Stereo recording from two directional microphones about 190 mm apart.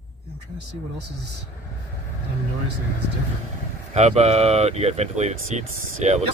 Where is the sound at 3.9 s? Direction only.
35° right (ahead or behind).